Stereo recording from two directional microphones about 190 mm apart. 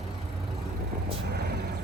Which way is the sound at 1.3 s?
60° right (ahead or behind).